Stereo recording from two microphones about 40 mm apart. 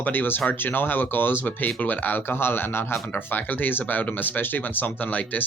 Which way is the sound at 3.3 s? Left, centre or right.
Left.